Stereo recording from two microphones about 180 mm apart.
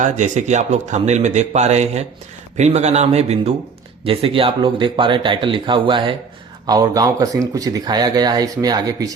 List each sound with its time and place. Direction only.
0.0 s speech: 40° right (ahead or behind); by 9.0 s 20° right (ahead or behind)